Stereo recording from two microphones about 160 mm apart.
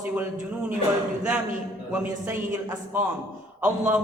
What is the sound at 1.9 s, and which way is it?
A man's voice, 15° right (ahead or behind).